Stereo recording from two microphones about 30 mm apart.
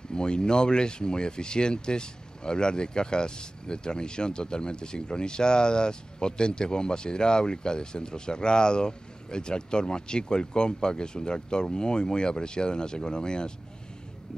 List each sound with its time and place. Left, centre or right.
0.1 s speech: left